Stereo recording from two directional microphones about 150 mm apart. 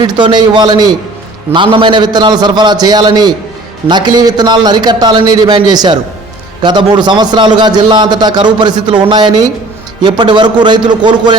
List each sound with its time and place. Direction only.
0.0 s a man's voice: 30° right (ahead or behind)